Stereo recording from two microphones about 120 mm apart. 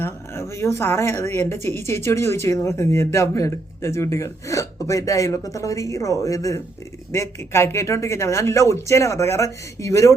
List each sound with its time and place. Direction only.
0.0 s speech: 20° left (ahead or behind)